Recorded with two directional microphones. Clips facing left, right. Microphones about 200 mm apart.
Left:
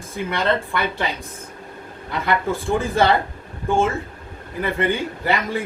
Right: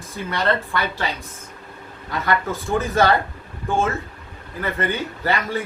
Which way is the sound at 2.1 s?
15° left (ahead or behind).